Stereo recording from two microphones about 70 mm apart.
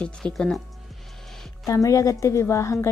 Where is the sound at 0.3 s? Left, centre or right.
Centre.